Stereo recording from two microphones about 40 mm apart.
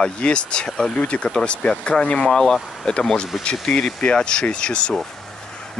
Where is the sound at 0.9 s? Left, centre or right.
Left.